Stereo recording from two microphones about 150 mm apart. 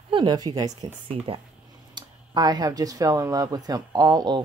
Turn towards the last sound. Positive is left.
turn(degrees=-30)  # may be behind; listen again after turning